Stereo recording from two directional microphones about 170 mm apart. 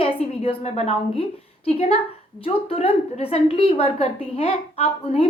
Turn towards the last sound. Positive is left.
turn(degrees=40)  # may be behind; listen again after turning